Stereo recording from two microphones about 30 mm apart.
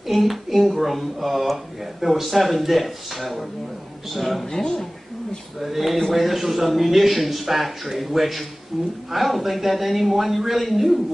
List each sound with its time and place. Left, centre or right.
0.0 s speech: centre
4.5 s speech: centre
5.6 s a woman's voice: centre